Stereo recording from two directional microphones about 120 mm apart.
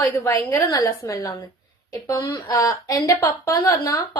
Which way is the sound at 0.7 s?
30° left (ahead or behind).